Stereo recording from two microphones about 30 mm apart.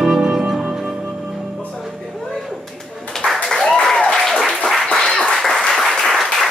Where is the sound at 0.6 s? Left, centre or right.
Centre.